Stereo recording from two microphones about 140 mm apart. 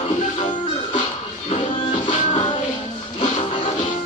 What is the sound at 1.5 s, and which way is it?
Music, 45° left (ahead or behind).